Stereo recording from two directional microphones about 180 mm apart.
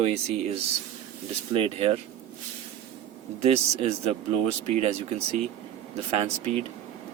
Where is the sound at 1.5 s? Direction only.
35° right (ahead or behind).